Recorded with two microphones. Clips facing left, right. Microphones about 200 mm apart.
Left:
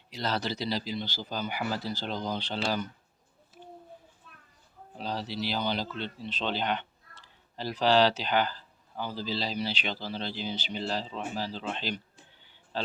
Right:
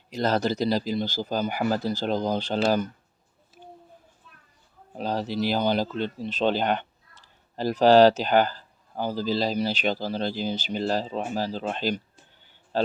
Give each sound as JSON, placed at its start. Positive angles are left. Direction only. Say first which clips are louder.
{"t": 0.1, "sound": "speech", "louder": "right 8 dB", "side_deg": -45}
{"t": 4.9, "sound": "speech", "louder": "right 7 dB", "side_deg": -50}